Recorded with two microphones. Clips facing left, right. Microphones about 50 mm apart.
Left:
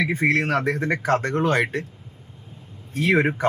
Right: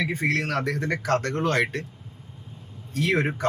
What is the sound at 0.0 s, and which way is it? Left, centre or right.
Speech, left.